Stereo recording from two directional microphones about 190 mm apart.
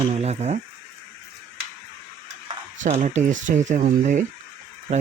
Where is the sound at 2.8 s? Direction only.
40° right (ahead or behind).